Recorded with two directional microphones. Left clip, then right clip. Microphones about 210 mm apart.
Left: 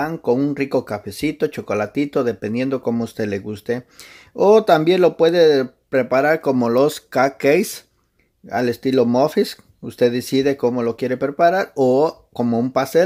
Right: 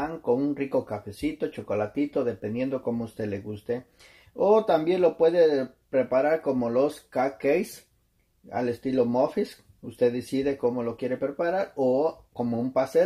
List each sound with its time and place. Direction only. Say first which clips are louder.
0.2 s speech: left 5 dB; 55° left (ahead or behind)